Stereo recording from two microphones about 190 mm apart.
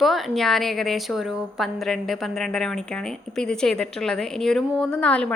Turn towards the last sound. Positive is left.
turn(degrees=5)  # may be behind; listen again after turning